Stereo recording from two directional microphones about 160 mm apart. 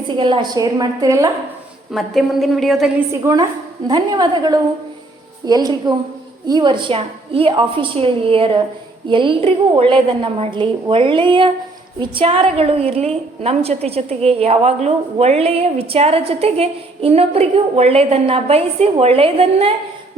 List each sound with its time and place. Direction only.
0.2 s a woman's voice: 30° right (ahead or behind)
1.9 s a woman's voice: centre (ahead or behind)
3.1 s a woman's voice: 20° right (ahead or behind); by 19.7 s 40° right (ahead or behind)